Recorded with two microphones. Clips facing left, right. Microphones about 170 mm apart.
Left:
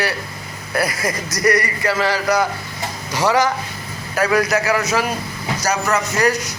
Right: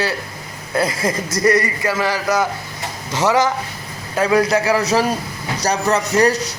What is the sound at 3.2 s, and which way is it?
A man's voice, 20° right (ahead or behind).